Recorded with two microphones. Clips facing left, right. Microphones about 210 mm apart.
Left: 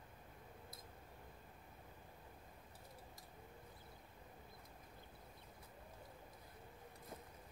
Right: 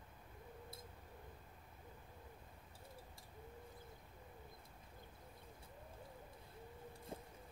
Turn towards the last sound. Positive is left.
turn(degrees=-30)  # may be behind; listen again after turning